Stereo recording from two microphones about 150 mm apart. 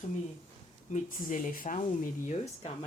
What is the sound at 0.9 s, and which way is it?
Speech, 65° left (ahead or behind).